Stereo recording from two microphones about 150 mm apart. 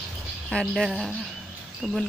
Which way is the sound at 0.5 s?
5° left (ahead or behind).